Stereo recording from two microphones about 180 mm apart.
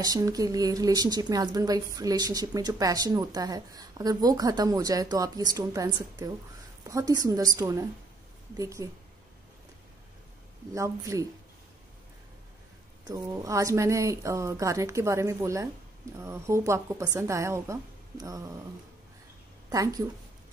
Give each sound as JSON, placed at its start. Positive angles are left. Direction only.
{"t": 0.0, "sound": "a woman's voice", "side_deg": -20}
{"t": 10.7, "sound": "a woman's voice", "side_deg": -20}
{"t": 13.0, "sound": "a woman's voice", "side_deg": -15}
{"t": 19.7, "sound": "a woman's voice", "side_deg": -20}